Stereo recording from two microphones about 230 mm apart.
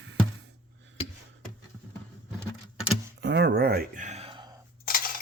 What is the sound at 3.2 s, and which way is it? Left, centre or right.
Speech, right.